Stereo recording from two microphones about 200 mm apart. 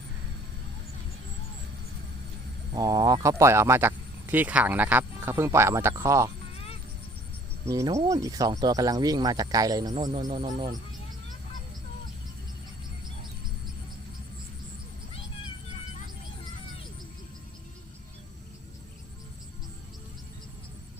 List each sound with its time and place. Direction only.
2.7 s speech: 20° right (ahead or behind)
7.6 s speech: 15° right (ahead or behind)
9.9 s speech: 35° right (ahead or behind)
10.2 s speech: 20° right (ahead or behind)